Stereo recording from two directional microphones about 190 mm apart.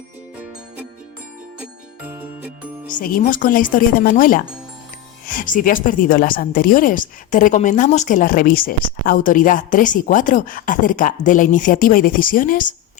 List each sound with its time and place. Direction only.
2.9 s a woman's voice: 50° left (ahead or behind)